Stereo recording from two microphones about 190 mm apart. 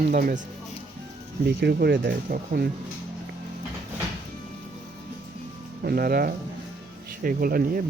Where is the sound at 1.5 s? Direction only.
55° right (ahead or behind).